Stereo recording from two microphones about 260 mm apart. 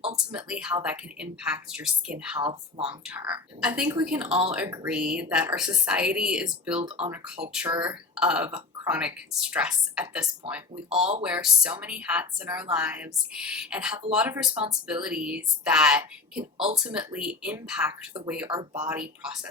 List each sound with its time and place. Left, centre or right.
0.3 s a woman's voice: centre
2.4 s speech: centre
2.8 s a woman's voice: centre
6.7 s speech: right
7.5 s a woman's voice: centre
10.9 s speech: right
11.2 s a woman's voice: centre